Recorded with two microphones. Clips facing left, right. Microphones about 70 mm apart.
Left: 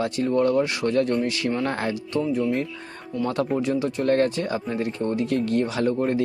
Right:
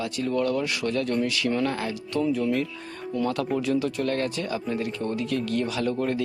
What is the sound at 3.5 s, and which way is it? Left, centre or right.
Speech, left.